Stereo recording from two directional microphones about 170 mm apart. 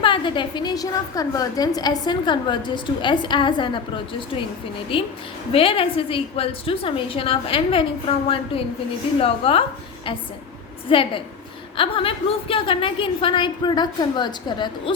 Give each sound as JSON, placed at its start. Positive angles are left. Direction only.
{"t": 0.0, "sound": "a woman's voice", "side_deg": 30}
{"t": 10.8, "sound": "a woman's voice", "side_deg": 30}